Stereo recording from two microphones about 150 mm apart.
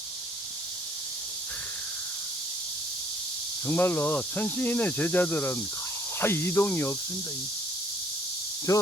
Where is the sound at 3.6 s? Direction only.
15° left (ahead or behind).